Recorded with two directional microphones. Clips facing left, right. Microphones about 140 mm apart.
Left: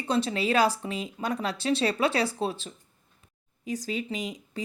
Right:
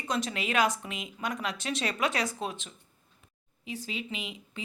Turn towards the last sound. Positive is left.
turn(degrees=40)  # may be behind; listen again after turning